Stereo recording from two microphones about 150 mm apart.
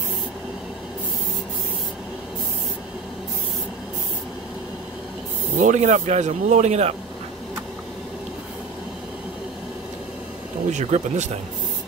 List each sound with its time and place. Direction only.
5.6 s speech: 55° right (ahead or behind)
10.7 s speech: 50° right (ahead or behind)